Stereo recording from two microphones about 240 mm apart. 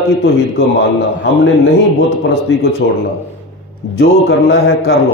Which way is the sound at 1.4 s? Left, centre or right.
Left.